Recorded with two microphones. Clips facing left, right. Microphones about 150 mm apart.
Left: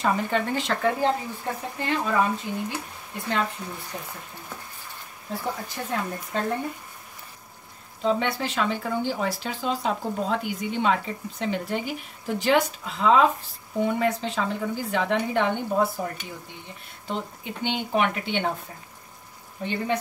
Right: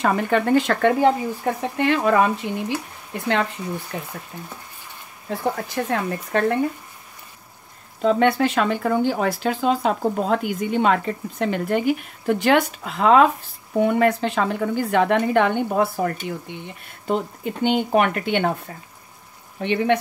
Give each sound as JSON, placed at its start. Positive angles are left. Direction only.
{"t": 0.0, "sound": "speech", "side_deg": -60}
{"t": 3.9, "sound": "speech", "side_deg": -70}
{"t": 5.4, "sound": "speech", "side_deg": -70}
{"t": 8.0, "sound": "speech", "side_deg": -60}
{"t": 17.1, "sound": "speech", "side_deg": -45}
{"t": 19.6, "sound": "speech", "side_deg": -75}